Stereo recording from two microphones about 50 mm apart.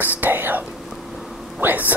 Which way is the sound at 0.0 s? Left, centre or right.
Right.